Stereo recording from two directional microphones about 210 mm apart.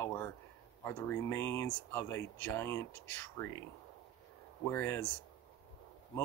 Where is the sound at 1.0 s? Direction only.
10° left (ahead or behind).